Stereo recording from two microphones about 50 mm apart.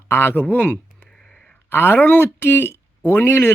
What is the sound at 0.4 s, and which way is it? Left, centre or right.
Speech, left.